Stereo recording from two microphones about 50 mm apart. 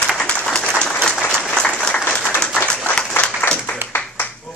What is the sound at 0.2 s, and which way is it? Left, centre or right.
Applause, centre.